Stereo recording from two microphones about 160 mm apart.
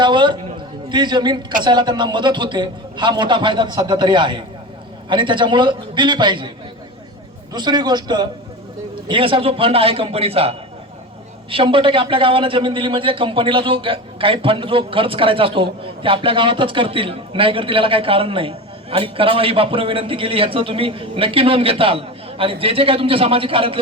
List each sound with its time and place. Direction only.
0.0 s a sound: 30° right (ahead or behind)
1.6 s a man's voice: 30° right (ahead or behind)
7.5 s a man's voice: 25° right (ahead or behind)
11.5 s a man's voice: 30° right (ahead or behind)